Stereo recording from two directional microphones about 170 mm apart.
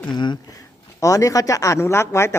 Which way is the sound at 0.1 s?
25° left (ahead or behind).